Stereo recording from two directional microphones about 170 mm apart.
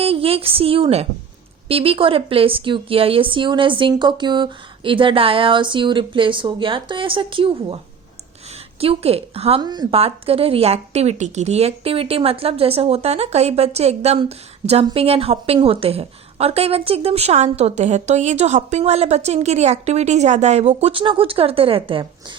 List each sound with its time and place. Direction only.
0.0 s a woman's voice: 35° right (ahead or behind)
8.8 s a woman's voice: 35° right (ahead or behind)